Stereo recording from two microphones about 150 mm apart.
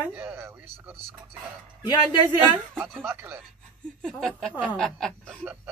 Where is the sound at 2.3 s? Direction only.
15° right (ahead or behind).